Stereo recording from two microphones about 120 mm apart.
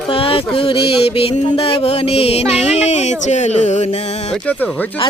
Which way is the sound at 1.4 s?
55° left (ahead or behind).